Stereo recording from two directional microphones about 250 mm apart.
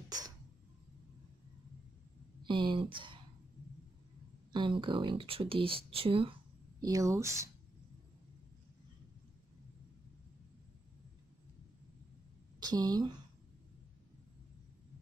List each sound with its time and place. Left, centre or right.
2.4 s speech: centre
4.5 s speech: centre
12.5 s a woman's voice: centre